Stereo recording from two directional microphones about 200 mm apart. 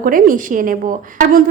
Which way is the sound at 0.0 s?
45° right (ahead or behind).